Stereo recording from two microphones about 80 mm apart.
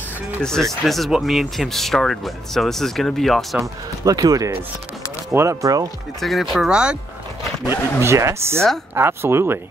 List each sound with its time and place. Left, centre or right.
0.4 s speech: centre
4.0 s speech: right
6.2 s speech: centre
8.0 s speech: right